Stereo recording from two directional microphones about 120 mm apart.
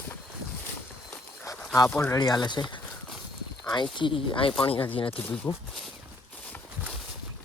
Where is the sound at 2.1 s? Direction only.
35° left (ahead or behind).